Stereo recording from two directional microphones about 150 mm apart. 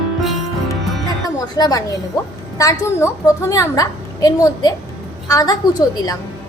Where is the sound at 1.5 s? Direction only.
25° left (ahead or behind).